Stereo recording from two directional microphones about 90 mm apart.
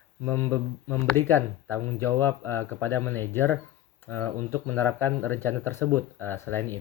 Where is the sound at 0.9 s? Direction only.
25° left (ahead or behind).